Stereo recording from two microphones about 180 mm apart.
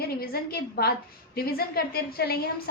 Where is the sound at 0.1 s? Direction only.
55° left (ahead or behind).